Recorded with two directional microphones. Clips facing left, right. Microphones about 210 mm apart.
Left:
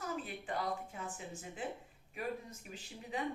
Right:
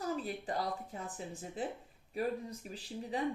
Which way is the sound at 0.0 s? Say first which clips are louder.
Right 5 dB; 35° right (ahead or behind).